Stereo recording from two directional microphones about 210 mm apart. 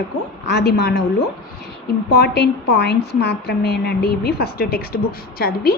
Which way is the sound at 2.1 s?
50° left (ahead or behind).